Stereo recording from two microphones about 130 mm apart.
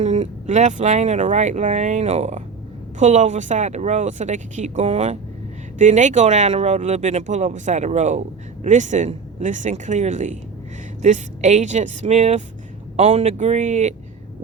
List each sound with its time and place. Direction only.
0.0 s speech: 55° right (ahead or behind)
13.0 s speech: 55° right (ahead or behind)